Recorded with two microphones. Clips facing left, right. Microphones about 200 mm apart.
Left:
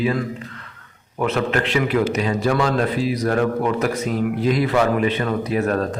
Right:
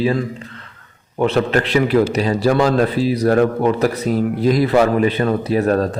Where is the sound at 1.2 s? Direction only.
35° right (ahead or behind).